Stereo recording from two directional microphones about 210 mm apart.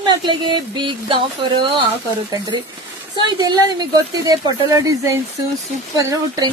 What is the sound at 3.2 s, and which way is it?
Speech, 20° right (ahead or behind).